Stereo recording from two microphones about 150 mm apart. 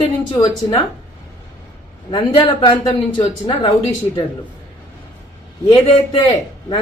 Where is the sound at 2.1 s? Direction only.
35° left (ahead or behind).